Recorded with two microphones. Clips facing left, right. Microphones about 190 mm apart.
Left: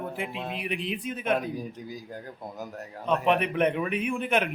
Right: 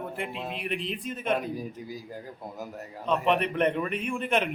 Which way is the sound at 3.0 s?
5° left (ahead or behind).